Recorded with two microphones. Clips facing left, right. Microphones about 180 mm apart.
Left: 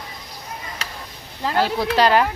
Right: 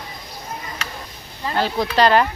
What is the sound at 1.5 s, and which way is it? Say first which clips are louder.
Speech: even; 5° left (ahead or behind).